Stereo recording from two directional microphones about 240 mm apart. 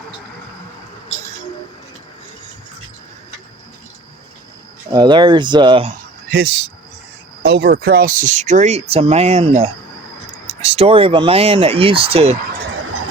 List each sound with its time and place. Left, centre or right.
4.9 s speech: centre
6.3 s speech: right